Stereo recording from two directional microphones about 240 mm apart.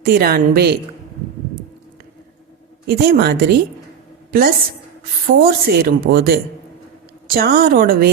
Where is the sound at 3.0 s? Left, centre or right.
Right.